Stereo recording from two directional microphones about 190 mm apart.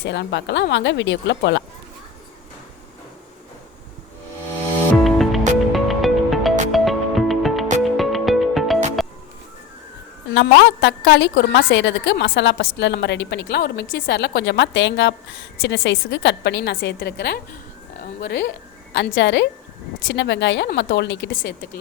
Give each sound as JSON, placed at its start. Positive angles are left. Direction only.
{"t": 0.0, "sound": "a woman's voice", "side_deg": 65}
{"t": 5.0, "sound": "music", "side_deg": 0}
{"t": 10.3, "sound": "a woman's voice", "side_deg": 70}
{"t": 18.9, "sound": "a woman's voice", "side_deg": 70}